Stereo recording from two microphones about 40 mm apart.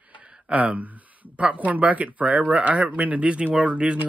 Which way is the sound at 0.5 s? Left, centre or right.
Right.